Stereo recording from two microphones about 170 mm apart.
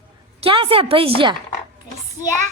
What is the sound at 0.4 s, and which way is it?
Speech, 30° right (ahead or behind).